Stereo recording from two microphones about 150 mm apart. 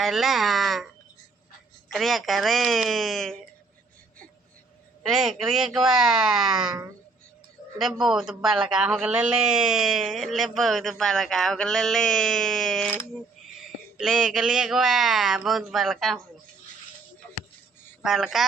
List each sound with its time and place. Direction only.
0.0 s speech: centre (ahead or behind)
1.9 s a man's voice: centre (ahead or behind)
5.0 s a man's voice: centre (ahead or behind)
6.7 s a woman's voice: 25° right (ahead or behind)
7.8 s a man's voice: centre (ahead or behind)
14.0 s a man's voice: 5° right (ahead or behind)
18.0 s a man's voice: centre (ahead or behind)